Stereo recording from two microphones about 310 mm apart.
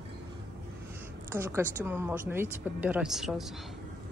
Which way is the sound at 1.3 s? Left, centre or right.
Centre.